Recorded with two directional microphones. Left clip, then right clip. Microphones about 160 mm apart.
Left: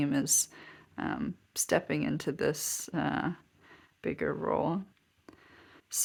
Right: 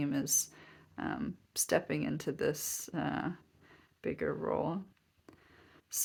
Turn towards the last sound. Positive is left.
turn(degrees=35)  # may be behind; listen again after turning